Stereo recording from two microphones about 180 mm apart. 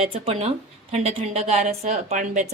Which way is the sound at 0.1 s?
35° right (ahead or behind).